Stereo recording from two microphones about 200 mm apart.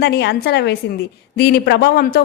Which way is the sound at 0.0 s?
55° left (ahead or behind).